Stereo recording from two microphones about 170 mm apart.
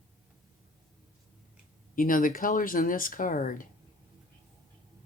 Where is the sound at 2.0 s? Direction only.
55° left (ahead or behind).